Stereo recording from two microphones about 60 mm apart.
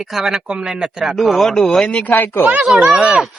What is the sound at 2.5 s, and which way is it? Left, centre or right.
Speech, centre.